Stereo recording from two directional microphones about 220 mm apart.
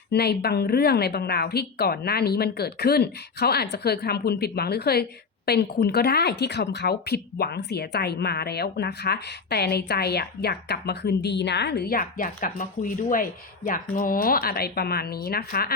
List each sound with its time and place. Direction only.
0.1 s a woman's voice: 45° left (ahead or behind)